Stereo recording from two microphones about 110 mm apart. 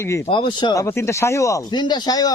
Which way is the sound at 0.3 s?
45° left (ahead or behind).